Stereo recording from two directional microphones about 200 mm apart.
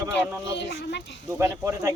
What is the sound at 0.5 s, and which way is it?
Speech, 55° left (ahead or behind).